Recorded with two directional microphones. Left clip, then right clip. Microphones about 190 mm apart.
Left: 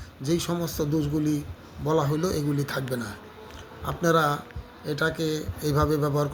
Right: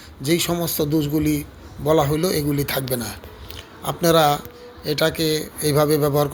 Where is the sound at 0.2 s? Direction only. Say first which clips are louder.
Right 6 dB; 15° right (ahead or behind).